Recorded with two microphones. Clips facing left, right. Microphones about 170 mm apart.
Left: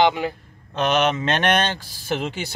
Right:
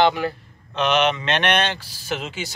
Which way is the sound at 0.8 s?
45° left (ahead or behind).